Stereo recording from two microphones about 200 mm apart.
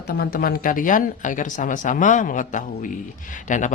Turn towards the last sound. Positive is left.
turn(degrees=40)  # may be behind; listen again after turning